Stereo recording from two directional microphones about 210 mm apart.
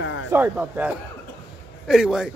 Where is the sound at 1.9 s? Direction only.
5° right (ahead or behind).